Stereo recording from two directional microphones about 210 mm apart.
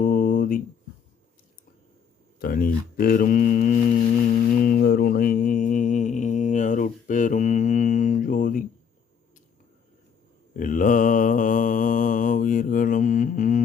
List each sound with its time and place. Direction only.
0.0 s a sound: 40° left (ahead or behind)
2.4 s speech: 45° left (ahead or behind)
4.4 s mantra: 45° left (ahead or behind)
10.5 s mantra: 40° left (ahead or behind)